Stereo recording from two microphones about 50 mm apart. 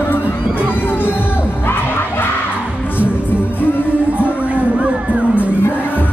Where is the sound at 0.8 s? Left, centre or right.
Left.